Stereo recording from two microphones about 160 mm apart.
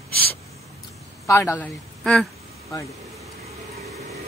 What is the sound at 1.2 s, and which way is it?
Speech, 20° left (ahead or behind).